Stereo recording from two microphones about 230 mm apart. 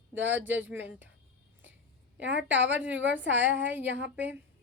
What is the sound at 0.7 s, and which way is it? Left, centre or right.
Speech, centre.